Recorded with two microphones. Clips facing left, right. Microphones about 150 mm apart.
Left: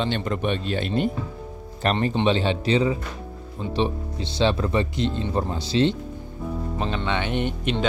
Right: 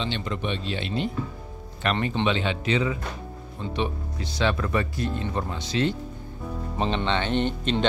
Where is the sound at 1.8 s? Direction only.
40° left (ahead or behind).